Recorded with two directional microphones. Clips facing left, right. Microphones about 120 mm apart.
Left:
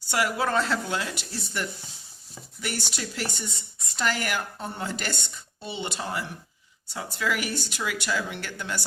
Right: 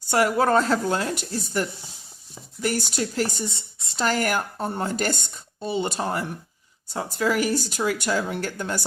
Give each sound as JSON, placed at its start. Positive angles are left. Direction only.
{"t": 0.1, "sound": "speech", "side_deg": -40}